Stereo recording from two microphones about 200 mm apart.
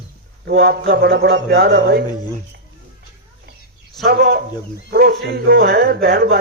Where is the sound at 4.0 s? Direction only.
55° right (ahead or behind).